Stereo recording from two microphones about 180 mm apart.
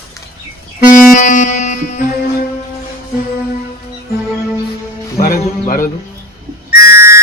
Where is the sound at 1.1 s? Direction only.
45° left (ahead or behind).